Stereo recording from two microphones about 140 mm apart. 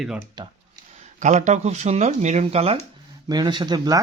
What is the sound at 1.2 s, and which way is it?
Speech, 55° right (ahead or behind).